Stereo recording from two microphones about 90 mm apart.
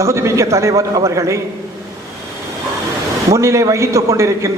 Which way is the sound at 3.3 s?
35° right (ahead or behind).